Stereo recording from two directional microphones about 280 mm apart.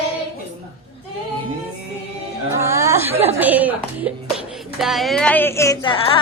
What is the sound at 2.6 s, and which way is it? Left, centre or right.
Speech, centre.